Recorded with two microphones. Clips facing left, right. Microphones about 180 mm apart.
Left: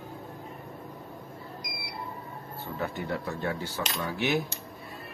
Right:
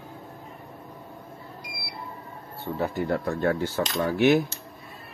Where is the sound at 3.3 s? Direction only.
55° right (ahead or behind).